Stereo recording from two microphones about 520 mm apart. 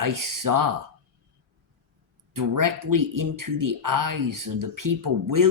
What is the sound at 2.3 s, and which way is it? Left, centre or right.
Speech, right.